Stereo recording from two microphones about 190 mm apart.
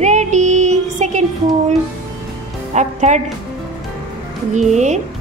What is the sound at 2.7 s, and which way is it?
Speech, 40° right (ahead or behind).